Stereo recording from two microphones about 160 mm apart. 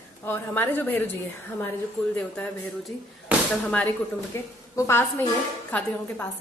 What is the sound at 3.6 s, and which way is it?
A woman's voice, 10° left (ahead or behind).